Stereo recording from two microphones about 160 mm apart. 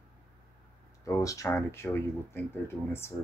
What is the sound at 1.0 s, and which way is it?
Speech, 20° left (ahead or behind).